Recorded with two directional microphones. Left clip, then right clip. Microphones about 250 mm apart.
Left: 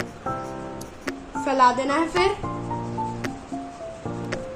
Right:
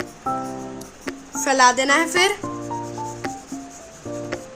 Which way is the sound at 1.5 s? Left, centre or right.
Right.